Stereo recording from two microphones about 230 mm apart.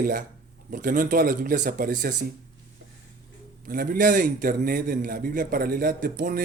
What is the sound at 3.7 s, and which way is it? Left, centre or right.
A man's voice, right.